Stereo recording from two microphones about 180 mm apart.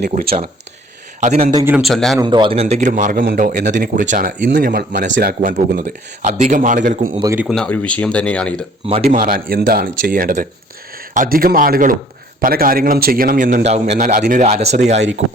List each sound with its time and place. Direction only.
0.1 s a man's voice: 50° right (ahead or behind)
1.2 s a man's voice: 40° right (ahead or behind)
1.5 s a man's voice: 10° right (ahead or behind)
1.8 s speech: centre (ahead or behind)
2.1 s a man's voice: 25° right (ahead or behind); by 4.4 s 45° right (ahead or behind)
4.6 s a man's voice: 55° right (ahead or behind)
7.3 s speech: centre (ahead or behind)
9.0 s a man's voice: 50° right (ahead or behind)